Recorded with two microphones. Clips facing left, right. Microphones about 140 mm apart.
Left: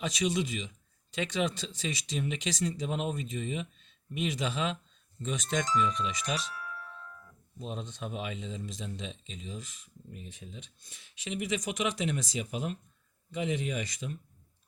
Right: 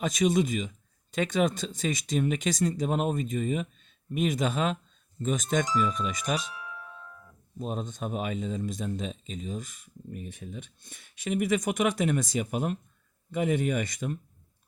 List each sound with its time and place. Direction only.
0.0 s speech: 50° right (ahead or behind)
6.5 s music: 15° right (ahead or behind)
7.6 s speech: 45° right (ahead or behind)